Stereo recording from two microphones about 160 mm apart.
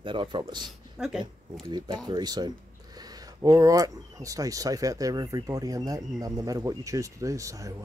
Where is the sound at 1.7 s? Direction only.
30° right (ahead or behind).